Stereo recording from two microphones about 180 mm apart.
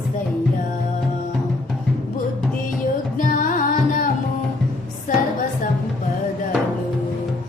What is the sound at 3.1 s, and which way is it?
Music, 45° left (ahead or behind).